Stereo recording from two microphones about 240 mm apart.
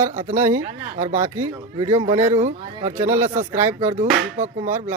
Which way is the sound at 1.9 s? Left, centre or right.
Right.